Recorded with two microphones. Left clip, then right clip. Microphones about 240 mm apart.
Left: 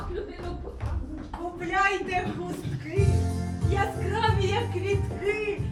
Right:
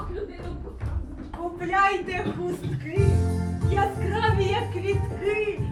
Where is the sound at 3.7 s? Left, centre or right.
Centre.